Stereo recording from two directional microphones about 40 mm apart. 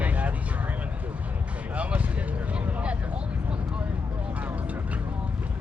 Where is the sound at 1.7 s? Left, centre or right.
Right.